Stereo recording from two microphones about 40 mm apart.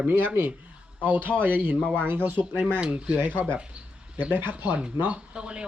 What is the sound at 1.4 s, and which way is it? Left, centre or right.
Speech, right.